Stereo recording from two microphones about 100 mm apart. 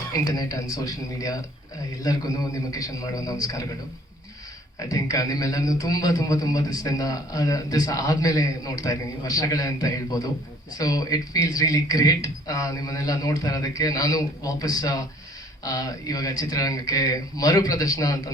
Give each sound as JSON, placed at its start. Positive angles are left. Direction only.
{"t": 0.1, "sound": "a man's voice", "side_deg": 40}
{"t": 4.8, "sound": "a man's voice", "side_deg": 35}